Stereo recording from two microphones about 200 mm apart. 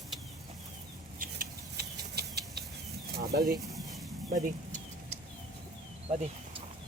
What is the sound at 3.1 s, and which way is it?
Bird, 50° right (ahead or behind).